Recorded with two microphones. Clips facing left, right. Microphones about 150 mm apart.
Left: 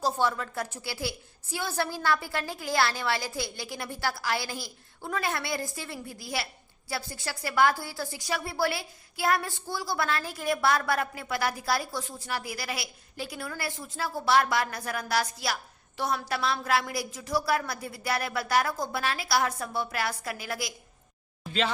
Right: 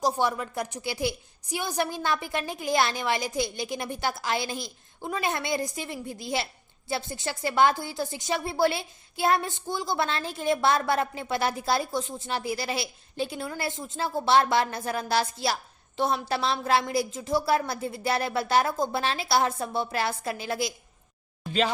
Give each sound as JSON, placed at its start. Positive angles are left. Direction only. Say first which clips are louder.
{"t": 0.0, "sound": "a woman's voice", "louder": "right 2 dB", "side_deg": -15}